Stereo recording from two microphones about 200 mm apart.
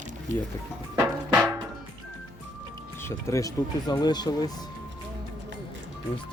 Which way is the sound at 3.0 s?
15° left (ahead or behind).